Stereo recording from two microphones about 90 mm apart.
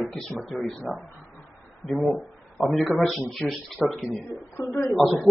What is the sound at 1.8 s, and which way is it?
Speech, centre (ahead or behind).